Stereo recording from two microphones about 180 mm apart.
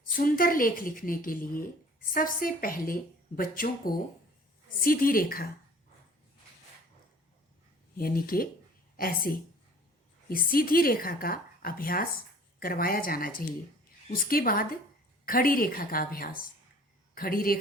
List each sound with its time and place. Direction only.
0.2 s a woman's voice: 50° left (ahead or behind)
7.9 s a woman's voice: 55° left (ahead or behind)